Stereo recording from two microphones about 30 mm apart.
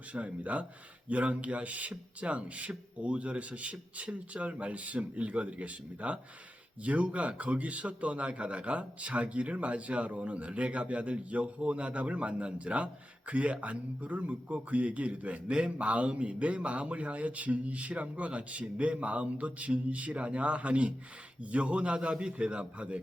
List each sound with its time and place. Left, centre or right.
0.1 s a man's voice: right